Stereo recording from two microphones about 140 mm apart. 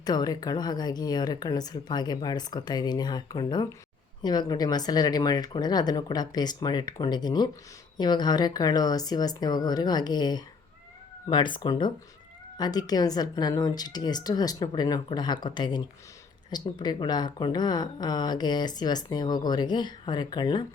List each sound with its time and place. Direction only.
0.0 s a woman's voice: 30° left (ahead or behind)